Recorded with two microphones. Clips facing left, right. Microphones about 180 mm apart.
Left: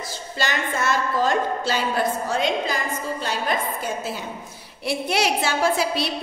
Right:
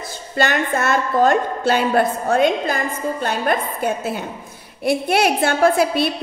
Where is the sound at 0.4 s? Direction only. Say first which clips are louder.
Right 6 dB; 60° right (ahead or behind).